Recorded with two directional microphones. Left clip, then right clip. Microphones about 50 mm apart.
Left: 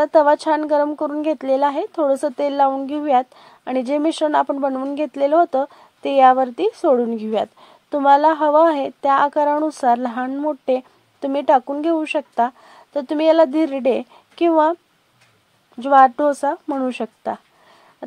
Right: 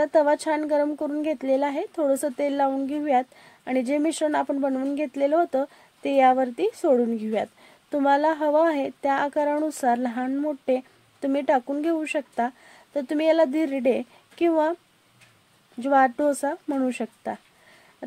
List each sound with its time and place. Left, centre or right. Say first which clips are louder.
0.0 s a woman's voice: left 6 dB; left
1.2 s speech: left 6 dB; left
1.9 s a woman's voice: left 5 dB; centre
4.0 s a woman's voice: left 5 dB; centre
4.3 s a woman's voice: left 6 dB; left
6.0 s speech: left 6 dB; left
6.7 s a woman's voice: left 4 dB; centre
7.2 s a woman's voice: left 6 dB; left
9.6 s a woman's voice: left 6 dB; centre
9.8 s a woman's voice: left 6 dB; left
15.8 s a woman's voice: left 7 dB; left
17.0 s a woman's voice: left 5 dB; centre